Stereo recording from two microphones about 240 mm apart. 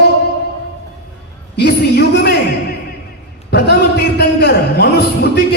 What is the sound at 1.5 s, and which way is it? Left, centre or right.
Speech, left.